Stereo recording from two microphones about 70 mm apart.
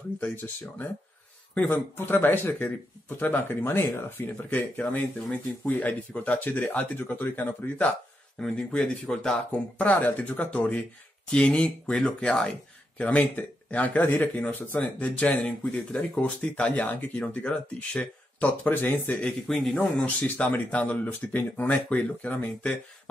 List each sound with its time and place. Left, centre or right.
1.7 s speech: left
8.4 s speech: centre
9.5 s speech: left
19.2 s speech: centre
20.0 s speech: centre